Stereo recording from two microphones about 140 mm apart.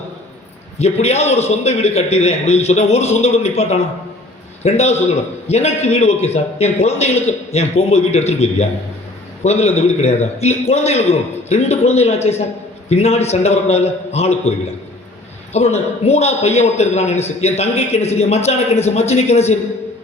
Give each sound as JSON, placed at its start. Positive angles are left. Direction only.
{"t": 0.8, "sound": "a man's voice", "side_deg": 50}
{"t": 15.5, "sound": "a man's voice", "side_deg": 50}